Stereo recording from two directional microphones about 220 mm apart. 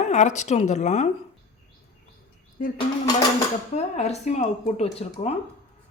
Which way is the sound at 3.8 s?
30° left (ahead or behind).